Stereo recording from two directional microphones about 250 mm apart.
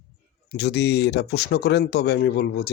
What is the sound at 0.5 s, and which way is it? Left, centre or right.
Speech, left.